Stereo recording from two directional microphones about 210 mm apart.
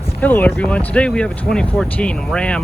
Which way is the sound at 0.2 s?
10° left (ahead or behind).